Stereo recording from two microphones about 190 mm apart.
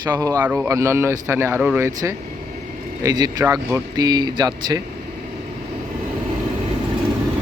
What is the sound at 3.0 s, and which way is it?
Speech, 20° right (ahead or behind).